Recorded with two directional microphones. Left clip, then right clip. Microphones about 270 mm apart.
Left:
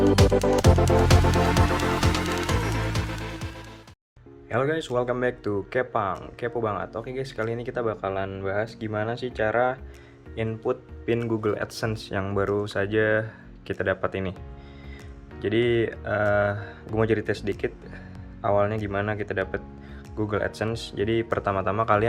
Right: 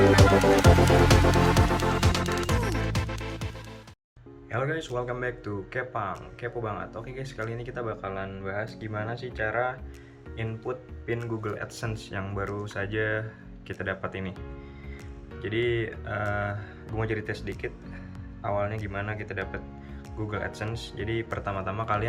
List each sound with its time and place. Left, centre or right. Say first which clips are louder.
0.2 s music: right 1 dB; centre
4.4 s speech: left 5 dB; left
15.4 s speech: left 5 dB; centre